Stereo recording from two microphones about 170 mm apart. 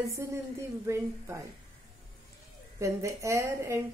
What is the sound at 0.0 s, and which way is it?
A woman's voice, 15° right (ahead or behind).